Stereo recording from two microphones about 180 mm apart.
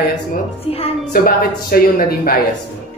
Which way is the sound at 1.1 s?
55° left (ahead or behind).